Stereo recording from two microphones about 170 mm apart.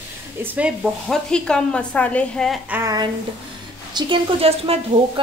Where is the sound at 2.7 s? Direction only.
15° right (ahead or behind).